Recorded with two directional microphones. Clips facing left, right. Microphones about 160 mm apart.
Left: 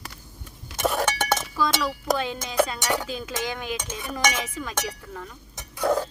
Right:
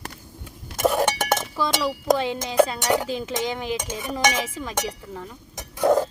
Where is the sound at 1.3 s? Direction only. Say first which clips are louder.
Right 1 dB; 15° right (ahead or behind).